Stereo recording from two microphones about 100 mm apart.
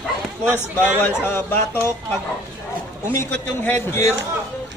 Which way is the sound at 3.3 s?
20° left (ahead or behind).